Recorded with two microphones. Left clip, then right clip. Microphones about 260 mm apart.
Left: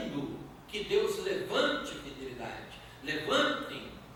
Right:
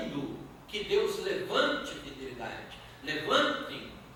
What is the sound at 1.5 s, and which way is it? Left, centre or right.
Speech, right.